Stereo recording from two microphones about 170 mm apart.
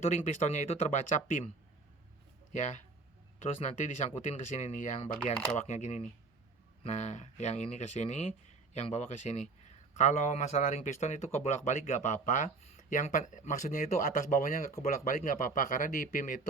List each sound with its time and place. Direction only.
0.1 s speech: 40° left (ahead or behind)
2.5 s speech: 45° left (ahead or behind)